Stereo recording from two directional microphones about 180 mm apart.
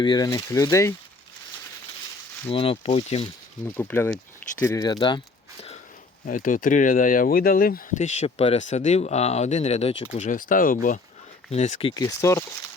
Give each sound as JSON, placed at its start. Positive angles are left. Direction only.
{"t": 0.0, "sound": "speech", "side_deg": 25}
{"t": 2.5, "sound": "speech", "side_deg": 30}
{"t": 3.8, "sound": "speech", "side_deg": 10}
{"t": 6.2, "sound": "speech", "side_deg": 50}
{"t": 12.0, "sound": "speech", "side_deg": 15}